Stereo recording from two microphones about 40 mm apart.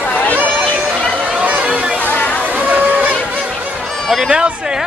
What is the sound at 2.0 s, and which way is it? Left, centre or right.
Chatter, left.